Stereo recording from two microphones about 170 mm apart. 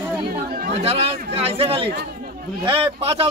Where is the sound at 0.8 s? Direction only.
35° right (ahead or behind).